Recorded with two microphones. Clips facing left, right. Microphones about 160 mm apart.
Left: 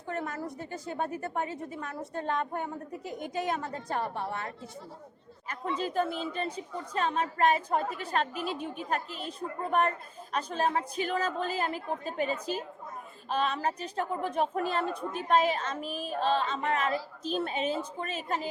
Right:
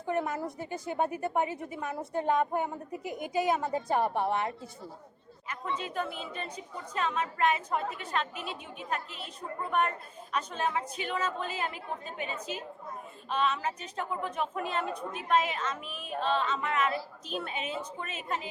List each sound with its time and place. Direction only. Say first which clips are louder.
0.1 s a woman's voice: right 3 dB; 15° right (ahead or behind)
5.5 s a woman's voice: left 3 dB; 35° left (ahead or behind)